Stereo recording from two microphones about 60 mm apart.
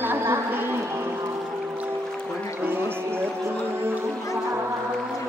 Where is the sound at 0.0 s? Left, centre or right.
Right.